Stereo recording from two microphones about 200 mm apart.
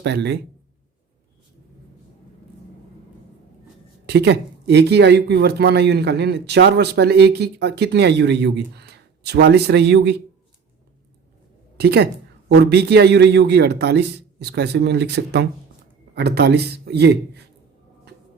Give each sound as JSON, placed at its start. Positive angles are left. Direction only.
{"t": 0.0, "sound": "speech", "side_deg": -60}
{"t": 4.0, "sound": "speech", "side_deg": -55}
{"t": 11.8, "sound": "a woman's voice", "side_deg": -55}